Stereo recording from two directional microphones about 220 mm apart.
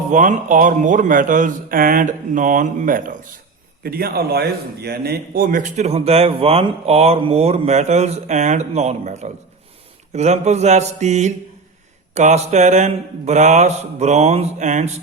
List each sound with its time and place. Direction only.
0.1 s a man's voice: 35° right (ahead or behind)